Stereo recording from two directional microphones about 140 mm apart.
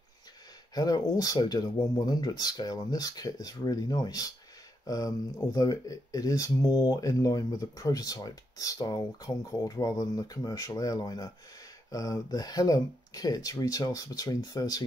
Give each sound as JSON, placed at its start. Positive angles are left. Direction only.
{"t": 0.7, "sound": "speech", "side_deg": 25}